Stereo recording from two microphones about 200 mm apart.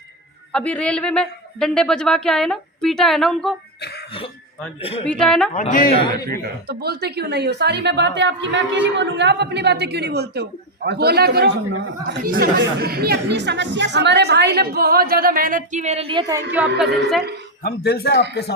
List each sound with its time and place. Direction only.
0.5 s a woman's voice: 5° left (ahead or behind)
3.8 s throat clearing: 55° left (ahead or behind)
4.8 s a man's voice: 30° left (ahead or behind)
5.0 s a woman's voice: 5° left (ahead or behind)
5.5 s a man's voice: 40° left (ahead or behind)
5.9 s a man's voice: 25° left (ahead or behind)
6.7 s a woman's voice: 50° right (ahead or behind); by 16.4 s 25° right (ahead or behind)
16.5 s a woman's voice: 5° right (ahead or behind)
17.6 s a man's voice: 50° left (ahead or behind)